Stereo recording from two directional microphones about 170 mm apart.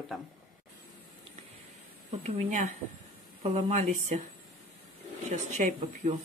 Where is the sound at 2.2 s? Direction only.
45° right (ahead or behind).